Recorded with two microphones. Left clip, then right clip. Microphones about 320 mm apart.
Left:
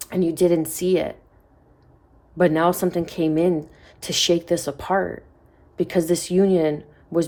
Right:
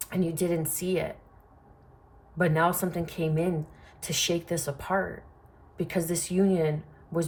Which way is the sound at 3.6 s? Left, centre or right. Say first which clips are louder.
Left 9 dB; centre.